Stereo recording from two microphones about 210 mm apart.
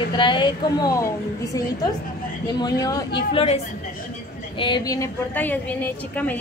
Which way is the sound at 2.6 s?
15° left (ahead or behind).